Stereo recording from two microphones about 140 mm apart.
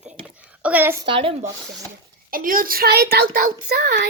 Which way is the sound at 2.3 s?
85° right.